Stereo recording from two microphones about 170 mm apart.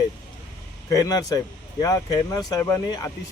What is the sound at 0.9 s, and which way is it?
Speech, 20° left (ahead or behind).